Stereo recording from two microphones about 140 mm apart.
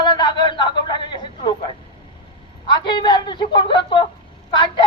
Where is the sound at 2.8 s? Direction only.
35° left (ahead or behind).